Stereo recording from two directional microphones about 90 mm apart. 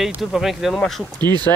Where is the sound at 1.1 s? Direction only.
50° right (ahead or behind).